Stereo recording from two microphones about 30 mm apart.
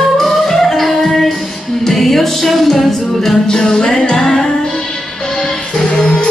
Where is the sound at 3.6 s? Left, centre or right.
Left.